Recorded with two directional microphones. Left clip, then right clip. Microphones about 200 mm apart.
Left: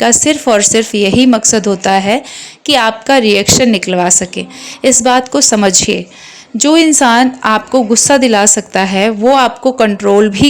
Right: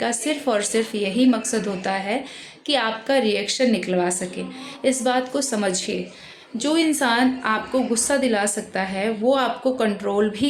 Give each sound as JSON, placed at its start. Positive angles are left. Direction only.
{"t": 0.0, "sound": "a woman's voice", "side_deg": 45}